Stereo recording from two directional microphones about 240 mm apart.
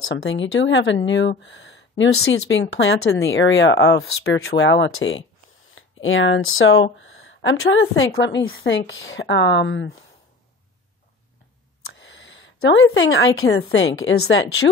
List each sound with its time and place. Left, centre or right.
0.1 s speech: left
11.8 s a woman's voice: left